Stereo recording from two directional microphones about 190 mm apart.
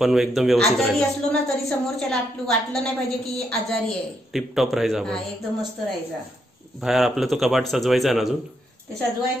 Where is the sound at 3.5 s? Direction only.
5° left (ahead or behind).